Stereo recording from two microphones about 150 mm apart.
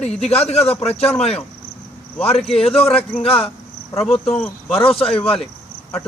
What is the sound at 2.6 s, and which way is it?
Speech, 40° left (ahead or behind).